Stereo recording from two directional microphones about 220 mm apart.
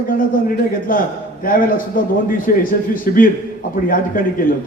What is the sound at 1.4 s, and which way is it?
A man's voice, 40° left (ahead or behind).